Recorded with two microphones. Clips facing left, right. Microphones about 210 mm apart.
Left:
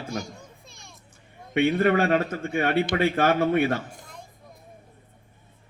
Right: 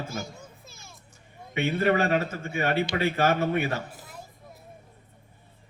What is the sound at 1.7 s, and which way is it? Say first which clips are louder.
A man's voice: left 1 dB; 50° left (ahead or behind).